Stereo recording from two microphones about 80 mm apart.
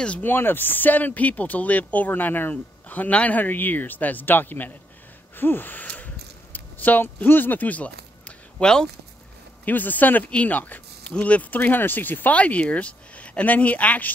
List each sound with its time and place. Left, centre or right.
0.2 s speech: left
5.3 s gasp: left
9.7 s speech: left